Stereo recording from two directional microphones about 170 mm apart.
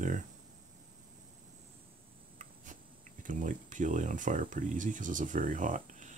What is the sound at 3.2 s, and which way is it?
Speech, 50° right (ahead or behind).